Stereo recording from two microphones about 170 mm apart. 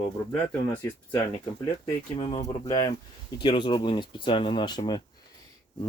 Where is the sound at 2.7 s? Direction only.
15° left (ahead or behind).